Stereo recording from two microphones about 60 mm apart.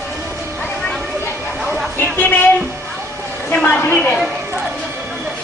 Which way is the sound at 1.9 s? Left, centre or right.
Left.